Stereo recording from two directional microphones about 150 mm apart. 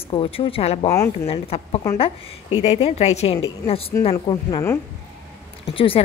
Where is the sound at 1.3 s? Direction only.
40° left (ahead or behind).